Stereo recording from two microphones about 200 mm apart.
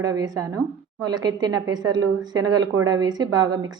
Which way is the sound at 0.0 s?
15° right (ahead or behind).